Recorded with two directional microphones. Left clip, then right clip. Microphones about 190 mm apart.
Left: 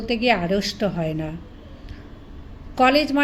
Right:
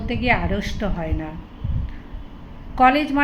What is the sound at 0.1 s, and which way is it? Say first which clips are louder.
A woman's voice: left 1 dB; 45° left (ahead or behind).